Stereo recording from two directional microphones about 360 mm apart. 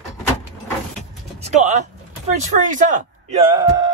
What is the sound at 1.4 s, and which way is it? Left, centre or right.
Speech, centre.